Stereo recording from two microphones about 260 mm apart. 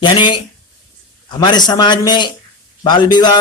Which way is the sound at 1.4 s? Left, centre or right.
Centre.